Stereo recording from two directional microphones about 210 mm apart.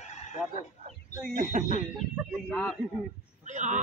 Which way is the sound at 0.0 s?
35° left (ahead or behind).